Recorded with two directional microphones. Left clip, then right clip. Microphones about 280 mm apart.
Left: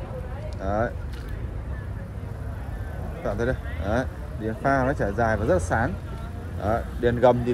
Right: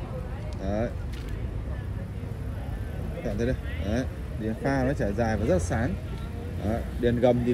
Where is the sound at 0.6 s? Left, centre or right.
Left.